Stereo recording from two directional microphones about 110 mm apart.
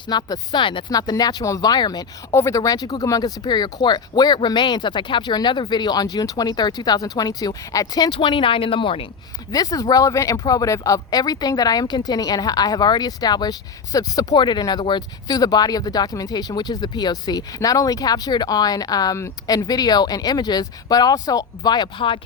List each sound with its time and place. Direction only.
0.1 s speech: 40° left (ahead or behind)
0.9 s speech: 35° left (ahead or behind)
2.3 s speech: 25° left (ahead or behind); by 9.0 s 55° left (ahead or behind)
9.5 s speech: 35° left (ahead or behind)